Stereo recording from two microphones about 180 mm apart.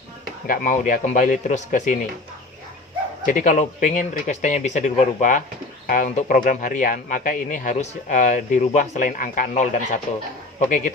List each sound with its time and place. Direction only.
0.4 s speech: 50° left (ahead or behind)
3.2 s speech: 45° left (ahead or behind)